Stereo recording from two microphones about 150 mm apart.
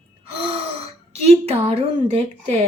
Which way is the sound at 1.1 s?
45° right (ahead or behind).